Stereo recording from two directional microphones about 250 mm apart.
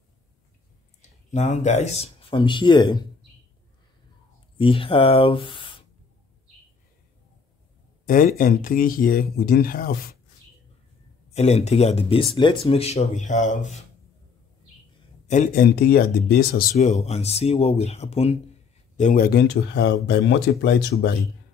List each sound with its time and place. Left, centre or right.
1.3 s speech: left
4.6 s speech: left
8.0 s speech: left
11.2 s speech: left
15.2 s speech: left